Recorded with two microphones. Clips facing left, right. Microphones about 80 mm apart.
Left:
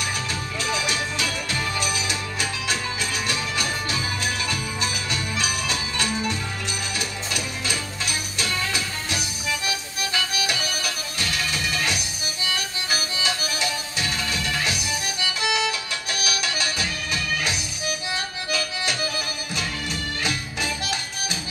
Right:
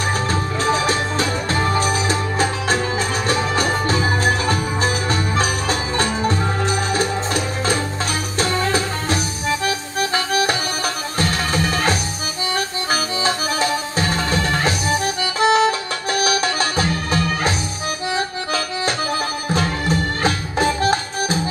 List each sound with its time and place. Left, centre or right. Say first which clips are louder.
0.3 s music: right 8 dB; right
18.1 s accordion: right 6 dB; right
19.5 s music: right 11 dB; right